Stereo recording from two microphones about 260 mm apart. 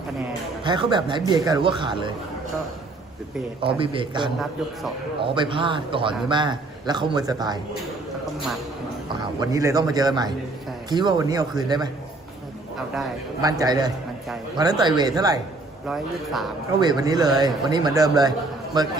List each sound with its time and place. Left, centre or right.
0.6 s a man's voice: centre
3.6 s a man's voice: centre
9.4 s a man's voice: centre
13.4 s a man's voice: centre
15.9 s speech: centre
16.8 s a man's voice: centre